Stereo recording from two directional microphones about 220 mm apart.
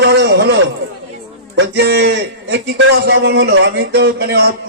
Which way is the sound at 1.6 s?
50° right (ahead or behind).